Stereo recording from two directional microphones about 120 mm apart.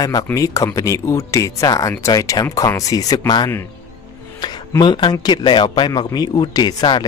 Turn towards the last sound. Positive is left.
turn(degrees=35)  # may be behind; listen again after turning